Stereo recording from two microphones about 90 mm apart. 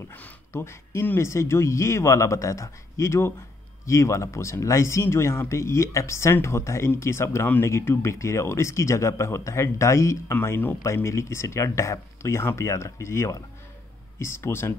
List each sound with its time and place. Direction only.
0.5 s speech: 30° left (ahead or behind)
7.6 s speech: 30° left (ahead or behind)